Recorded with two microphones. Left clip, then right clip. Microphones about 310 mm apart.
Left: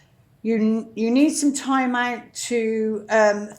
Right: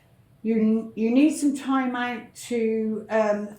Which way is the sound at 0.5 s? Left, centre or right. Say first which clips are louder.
Even; left.